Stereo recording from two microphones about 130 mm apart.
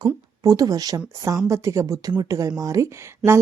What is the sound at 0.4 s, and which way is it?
A woman's voice, 25° right (ahead or behind).